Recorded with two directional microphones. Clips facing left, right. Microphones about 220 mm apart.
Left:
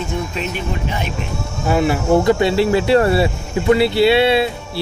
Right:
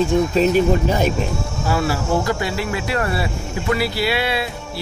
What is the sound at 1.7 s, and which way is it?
Speech, 20° left (ahead or behind).